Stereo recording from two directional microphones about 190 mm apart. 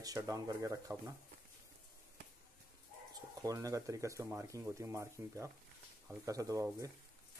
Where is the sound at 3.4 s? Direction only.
20° right (ahead or behind).